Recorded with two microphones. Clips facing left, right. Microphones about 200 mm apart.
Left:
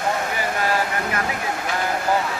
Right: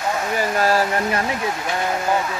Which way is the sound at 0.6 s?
40° right (ahead or behind).